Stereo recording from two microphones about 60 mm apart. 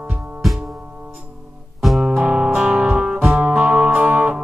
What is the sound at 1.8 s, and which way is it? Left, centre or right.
Music, centre.